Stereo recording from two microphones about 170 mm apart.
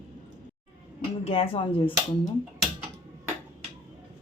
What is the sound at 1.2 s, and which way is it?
Speech, 35° left (ahead or behind).